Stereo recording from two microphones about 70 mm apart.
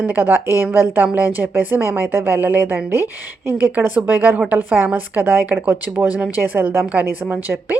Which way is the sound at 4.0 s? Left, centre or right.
Right.